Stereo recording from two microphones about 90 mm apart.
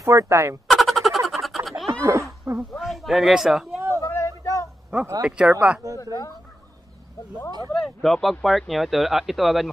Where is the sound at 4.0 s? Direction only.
35° left (ahead or behind).